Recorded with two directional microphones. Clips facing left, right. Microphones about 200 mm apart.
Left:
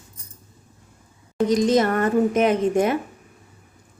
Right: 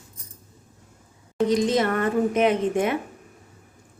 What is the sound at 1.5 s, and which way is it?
Speech, 40° left (ahead or behind).